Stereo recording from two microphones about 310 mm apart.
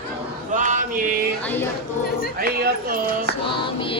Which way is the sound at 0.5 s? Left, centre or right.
Right.